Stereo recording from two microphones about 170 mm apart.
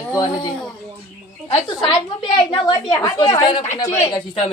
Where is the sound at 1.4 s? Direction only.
30° left (ahead or behind).